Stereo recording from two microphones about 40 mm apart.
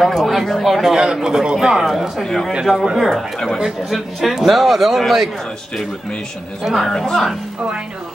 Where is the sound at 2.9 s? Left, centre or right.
Centre.